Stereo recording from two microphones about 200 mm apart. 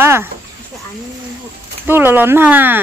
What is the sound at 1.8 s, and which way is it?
Speech, 10° right (ahead or behind).